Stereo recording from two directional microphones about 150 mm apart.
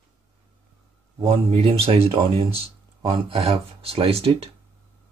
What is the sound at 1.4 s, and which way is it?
Speech, 40° right (ahead or behind).